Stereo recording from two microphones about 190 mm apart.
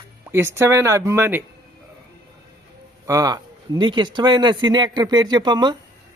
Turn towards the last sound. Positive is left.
turn(degrees=-25)  # may be behind; listen again after turning